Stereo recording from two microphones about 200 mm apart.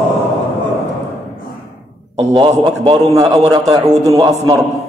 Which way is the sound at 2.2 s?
20° right (ahead or behind).